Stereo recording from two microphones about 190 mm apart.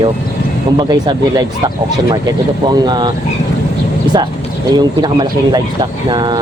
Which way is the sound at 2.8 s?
20° right (ahead or behind).